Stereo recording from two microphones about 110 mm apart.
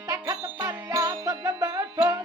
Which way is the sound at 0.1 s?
35° right (ahead or behind).